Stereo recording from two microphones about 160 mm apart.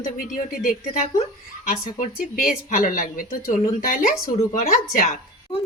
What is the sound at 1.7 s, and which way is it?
Speech, 60° left (ahead or behind).